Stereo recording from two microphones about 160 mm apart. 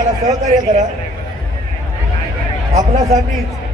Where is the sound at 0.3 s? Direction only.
50° right (ahead or behind).